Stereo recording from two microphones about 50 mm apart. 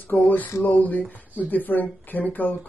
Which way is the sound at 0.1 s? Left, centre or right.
Left.